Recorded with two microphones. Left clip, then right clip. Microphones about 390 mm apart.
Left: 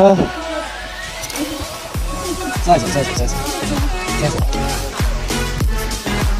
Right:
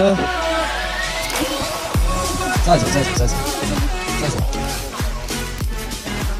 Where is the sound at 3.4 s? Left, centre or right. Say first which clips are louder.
Left 1 dB; centre.